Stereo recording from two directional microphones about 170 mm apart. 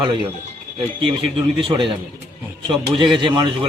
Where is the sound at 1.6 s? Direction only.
30° right (ahead or behind).